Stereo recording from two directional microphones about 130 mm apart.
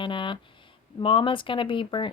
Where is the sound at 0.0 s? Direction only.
40° left (ahead or behind).